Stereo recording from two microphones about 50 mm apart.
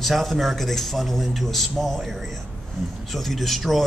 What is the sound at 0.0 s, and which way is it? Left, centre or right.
Speech, centre.